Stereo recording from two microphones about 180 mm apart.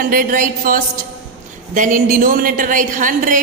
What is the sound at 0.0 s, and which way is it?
A woman's voice, 50° right (ahead or behind).